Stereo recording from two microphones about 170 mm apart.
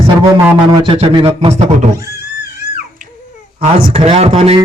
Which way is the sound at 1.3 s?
40° right (ahead or behind).